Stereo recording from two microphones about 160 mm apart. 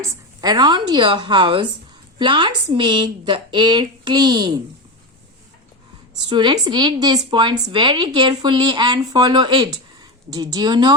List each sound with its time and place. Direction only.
0.0 s a woman's voice: 20° right (ahead or behind)
6.2 s a woman's voice: 30° right (ahead or behind)